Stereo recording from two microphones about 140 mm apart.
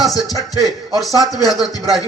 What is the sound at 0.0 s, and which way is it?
Speech, 25° left (ahead or behind).